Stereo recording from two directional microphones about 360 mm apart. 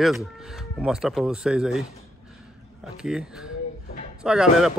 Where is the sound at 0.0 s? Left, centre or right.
Centre.